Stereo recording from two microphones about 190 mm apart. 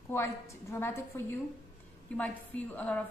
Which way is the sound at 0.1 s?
15° left (ahead or behind).